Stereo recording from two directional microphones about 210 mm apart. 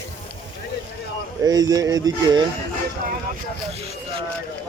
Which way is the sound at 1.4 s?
20° right (ahead or behind).